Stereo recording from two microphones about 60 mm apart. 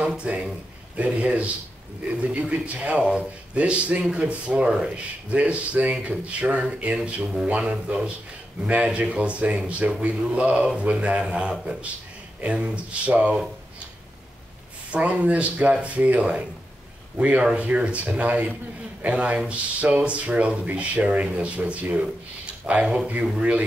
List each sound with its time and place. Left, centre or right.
0.2 s a man's voice: right
14.9 s a man's voice: right